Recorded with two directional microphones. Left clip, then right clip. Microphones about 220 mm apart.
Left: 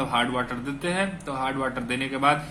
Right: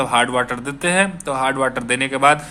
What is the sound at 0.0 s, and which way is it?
Speech, 35° right (ahead or behind).